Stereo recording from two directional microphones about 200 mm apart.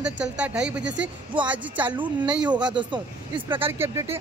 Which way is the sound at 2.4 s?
20° right (ahead or behind).